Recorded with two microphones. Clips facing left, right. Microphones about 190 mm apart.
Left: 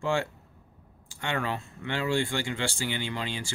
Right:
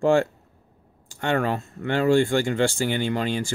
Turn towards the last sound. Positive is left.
turn(degrees=-45)  # may be behind; listen again after turning